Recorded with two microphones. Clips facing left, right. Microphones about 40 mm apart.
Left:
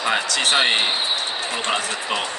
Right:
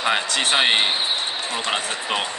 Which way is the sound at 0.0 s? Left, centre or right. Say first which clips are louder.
Even; right.